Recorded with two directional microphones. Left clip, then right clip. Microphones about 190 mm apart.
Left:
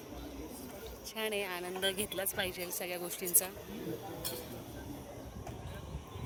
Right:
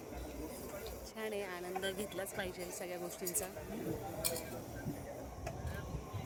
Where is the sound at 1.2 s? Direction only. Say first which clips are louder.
Left 6 dB; 20° left (ahead or behind).